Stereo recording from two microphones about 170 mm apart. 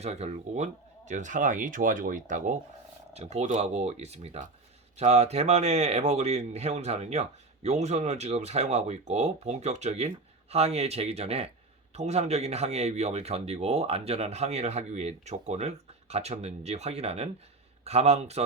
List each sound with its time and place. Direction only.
0.0 s speech: 40° right (ahead or behind)